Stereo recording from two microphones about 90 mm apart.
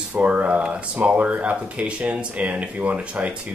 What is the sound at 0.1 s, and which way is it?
Speech, 15° right (ahead or behind).